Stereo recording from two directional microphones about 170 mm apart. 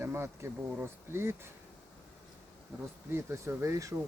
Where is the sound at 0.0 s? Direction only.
15° right (ahead or behind).